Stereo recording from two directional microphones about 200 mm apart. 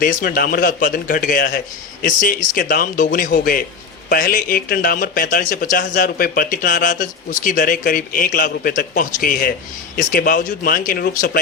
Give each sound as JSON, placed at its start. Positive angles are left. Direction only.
{"t": 0.0, "sound": "a man's voice", "side_deg": 45}